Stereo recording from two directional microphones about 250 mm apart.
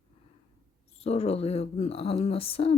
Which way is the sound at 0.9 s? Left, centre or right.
Left.